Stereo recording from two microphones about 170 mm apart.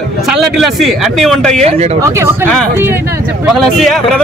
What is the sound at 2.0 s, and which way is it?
Speech, 15° right (ahead or behind).